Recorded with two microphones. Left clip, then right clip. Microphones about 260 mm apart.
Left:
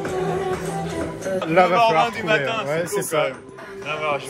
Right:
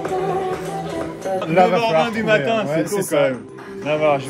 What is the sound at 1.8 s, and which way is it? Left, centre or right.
Speech, left.